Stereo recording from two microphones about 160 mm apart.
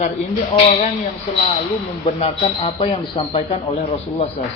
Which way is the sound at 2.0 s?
35° left (ahead or behind).